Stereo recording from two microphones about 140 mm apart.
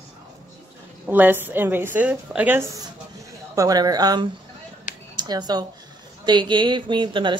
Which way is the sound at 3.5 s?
25° right (ahead or behind).